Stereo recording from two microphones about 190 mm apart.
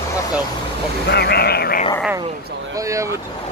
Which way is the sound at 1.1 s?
55° left (ahead or behind).